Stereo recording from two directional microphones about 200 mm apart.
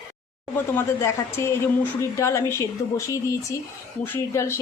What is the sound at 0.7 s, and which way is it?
A woman's voice, 15° left (ahead or behind).